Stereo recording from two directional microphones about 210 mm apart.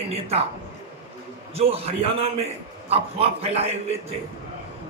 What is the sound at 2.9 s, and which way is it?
Speech, 30° right (ahead or behind).